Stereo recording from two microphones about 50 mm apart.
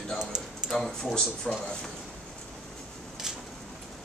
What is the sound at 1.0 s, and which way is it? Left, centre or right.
Speech, centre.